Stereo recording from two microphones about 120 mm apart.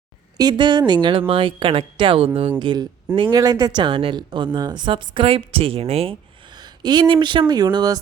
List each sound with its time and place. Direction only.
0.3 s speech: 40° right (ahead or behind)
2.6 s speech: 40° right (ahead or behind); by 6.1 s 55° right (ahead or behind)
6.5 s speech: 40° right (ahead or behind)